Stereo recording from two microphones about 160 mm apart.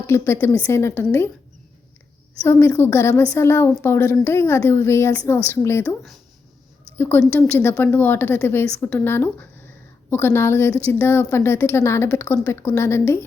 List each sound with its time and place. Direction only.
0.1 s a woman's voice: 15° left (ahead or behind)
2.4 s a woman's voice: 15° left (ahead or behind)